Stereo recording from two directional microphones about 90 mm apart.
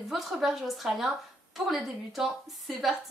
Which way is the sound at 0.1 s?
5° right (ahead or behind).